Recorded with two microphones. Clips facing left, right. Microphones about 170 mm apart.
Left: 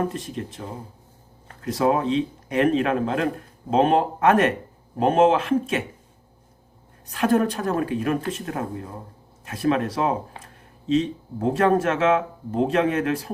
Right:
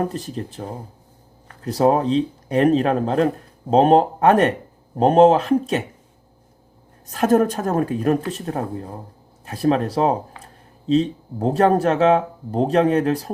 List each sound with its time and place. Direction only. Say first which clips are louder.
0.0 s speech: right 2 dB; 35° right (ahead or behind)
7.1 s speech: right 4 dB; 45° right (ahead or behind)